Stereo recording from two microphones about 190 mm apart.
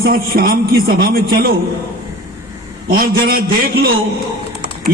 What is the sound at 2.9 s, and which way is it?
Speech, 50° right (ahead or behind).